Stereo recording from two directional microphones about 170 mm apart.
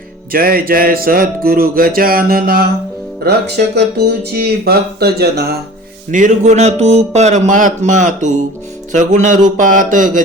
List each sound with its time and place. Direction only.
0.3 s speech: 60° right (ahead or behind)
3.2 s speech: 75° right (ahead or behind)
6.1 s speech: 50° right (ahead or behind)